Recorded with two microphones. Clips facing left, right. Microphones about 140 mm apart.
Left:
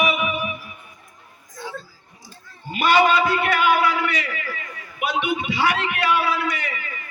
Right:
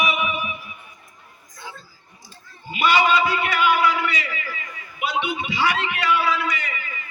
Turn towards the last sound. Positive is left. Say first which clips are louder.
# left 1 dB
turn(degrees=50)  # may be behind; listen again after turning